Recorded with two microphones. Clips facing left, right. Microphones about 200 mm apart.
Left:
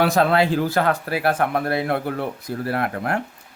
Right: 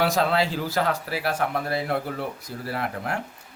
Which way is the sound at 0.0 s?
55° left (ahead or behind).